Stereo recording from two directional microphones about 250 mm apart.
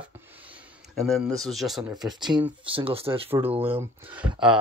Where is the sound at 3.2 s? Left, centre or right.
Centre.